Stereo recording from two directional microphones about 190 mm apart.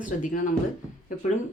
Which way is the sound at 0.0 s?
45° left (ahead or behind).